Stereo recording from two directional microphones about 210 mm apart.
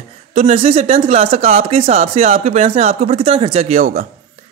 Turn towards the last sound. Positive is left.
turn(degrees=-35)  # may be behind; listen again after turning